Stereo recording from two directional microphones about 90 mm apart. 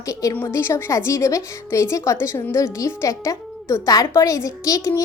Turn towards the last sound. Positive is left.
turn(degrees=35)  # may be behind; listen again after turning